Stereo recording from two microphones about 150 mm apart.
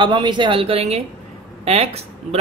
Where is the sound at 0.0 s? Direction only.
30° right (ahead or behind).